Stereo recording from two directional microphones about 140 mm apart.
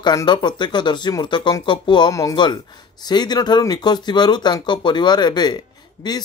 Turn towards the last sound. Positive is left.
turn(degrees=30)  # may be behind; listen again after turning